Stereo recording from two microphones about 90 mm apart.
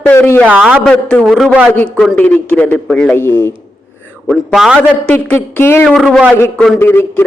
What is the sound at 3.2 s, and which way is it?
Speech, 25° left (ahead or behind).